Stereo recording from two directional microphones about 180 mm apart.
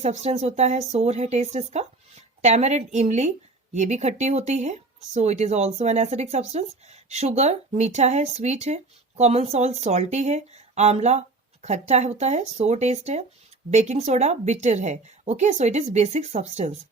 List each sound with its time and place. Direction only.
0.0 s speech: 40° right (ahead or behind)